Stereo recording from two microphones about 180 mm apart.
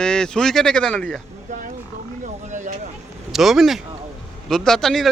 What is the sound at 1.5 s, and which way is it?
Speech, 40° right (ahead or behind).